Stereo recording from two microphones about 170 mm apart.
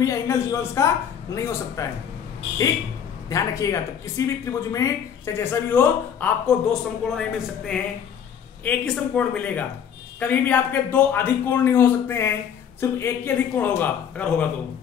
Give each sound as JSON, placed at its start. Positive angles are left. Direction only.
{"t": 0.0, "sound": "speech", "side_deg": 20}
{"t": 3.3, "sound": "speech", "side_deg": 20}